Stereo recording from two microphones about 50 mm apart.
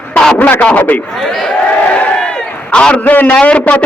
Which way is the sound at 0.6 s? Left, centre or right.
Left.